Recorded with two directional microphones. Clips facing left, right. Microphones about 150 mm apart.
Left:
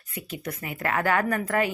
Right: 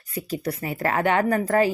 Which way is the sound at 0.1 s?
35° right (ahead or behind).